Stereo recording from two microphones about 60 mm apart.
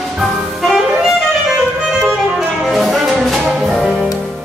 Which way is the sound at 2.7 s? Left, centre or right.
Centre.